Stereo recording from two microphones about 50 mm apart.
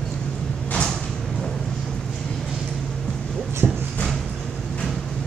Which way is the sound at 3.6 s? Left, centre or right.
Right.